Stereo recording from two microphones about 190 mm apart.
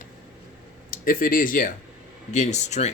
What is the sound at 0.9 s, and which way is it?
Speech, 50° left (ahead or behind).